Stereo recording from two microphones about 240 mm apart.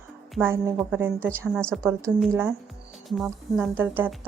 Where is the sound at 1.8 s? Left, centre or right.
Centre.